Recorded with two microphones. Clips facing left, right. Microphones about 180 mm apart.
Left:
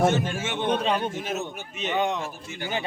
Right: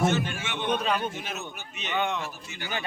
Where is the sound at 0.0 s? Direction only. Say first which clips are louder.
Left 3 dB; 50° left (ahead or behind).